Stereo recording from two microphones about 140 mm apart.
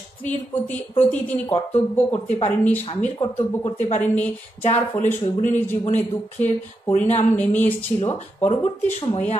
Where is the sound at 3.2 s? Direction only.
25° left (ahead or behind).